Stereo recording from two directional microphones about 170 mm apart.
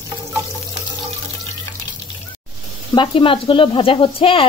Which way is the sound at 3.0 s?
30° left (ahead or behind).